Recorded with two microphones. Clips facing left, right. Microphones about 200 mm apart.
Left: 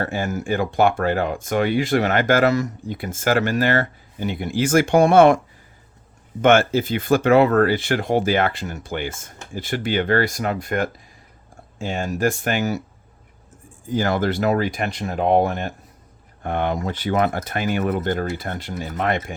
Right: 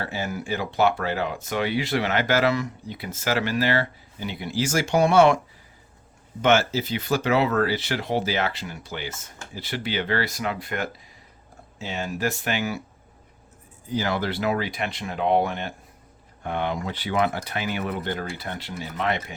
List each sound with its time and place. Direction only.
0.0 s speech: 50° left (ahead or behind)
6.4 s speech: 55° left (ahead or behind)
13.8 s speech: 50° left (ahead or behind)